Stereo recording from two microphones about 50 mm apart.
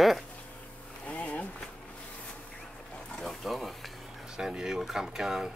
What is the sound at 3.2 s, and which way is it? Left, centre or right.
Frying, centre.